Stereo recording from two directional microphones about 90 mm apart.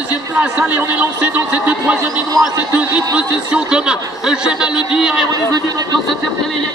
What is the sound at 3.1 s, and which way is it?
A man's voice, 10° right (ahead or behind).